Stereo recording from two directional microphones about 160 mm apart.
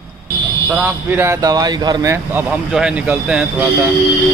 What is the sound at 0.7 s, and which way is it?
Speech, 15° right (ahead or behind).